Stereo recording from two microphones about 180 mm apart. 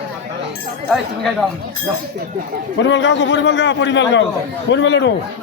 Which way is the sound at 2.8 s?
90° left.